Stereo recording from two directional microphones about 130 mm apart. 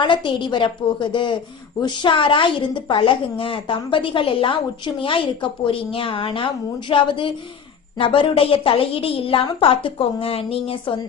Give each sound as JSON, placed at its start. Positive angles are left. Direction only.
{"t": 0.0, "sound": "a woman's voice", "side_deg": 40}